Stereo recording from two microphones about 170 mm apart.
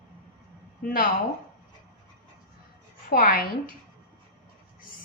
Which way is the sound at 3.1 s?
60° left (ahead or behind).